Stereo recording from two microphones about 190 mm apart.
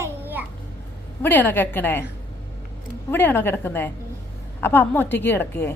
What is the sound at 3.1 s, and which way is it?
A woman's voice, 10° left (ahead or behind).